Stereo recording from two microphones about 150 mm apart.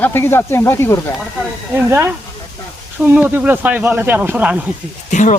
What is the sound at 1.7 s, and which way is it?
Speech, 15° right (ahead or behind).